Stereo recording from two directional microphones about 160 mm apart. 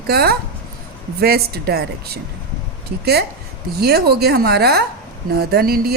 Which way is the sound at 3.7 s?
80° right.